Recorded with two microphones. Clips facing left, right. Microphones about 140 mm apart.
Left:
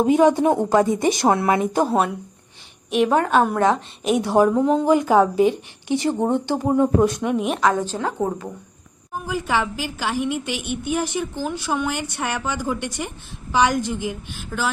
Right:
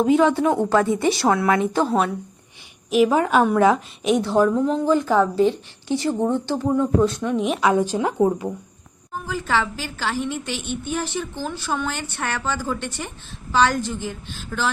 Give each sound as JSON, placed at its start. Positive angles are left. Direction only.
{"t": 0.0, "sound": "a woman's voice", "side_deg": 15}
{"t": 2.9, "sound": "a woman's voice", "side_deg": 0}
{"t": 4.2, "sound": "a woman's voice", "side_deg": 15}
{"t": 7.3, "sound": "a woman's voice", "side_deg": 0}
{"t": 7.6, "sound": "speech", "side_deg": -10}
{"t": 9.1, "sound": "a woman's voice", "side_deg": 15}